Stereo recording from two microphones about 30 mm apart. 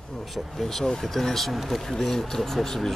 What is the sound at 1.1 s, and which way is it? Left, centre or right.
Speech, centre.